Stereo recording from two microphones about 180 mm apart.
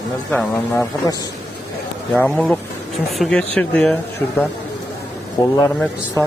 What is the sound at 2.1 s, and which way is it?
Speech, 5° left (ahead or behind).